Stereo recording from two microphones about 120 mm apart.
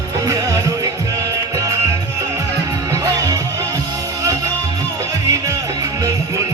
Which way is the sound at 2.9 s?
30° right (ahead or behind).